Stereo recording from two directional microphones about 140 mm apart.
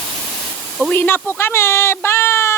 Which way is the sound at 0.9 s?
15° left (ahead or behind).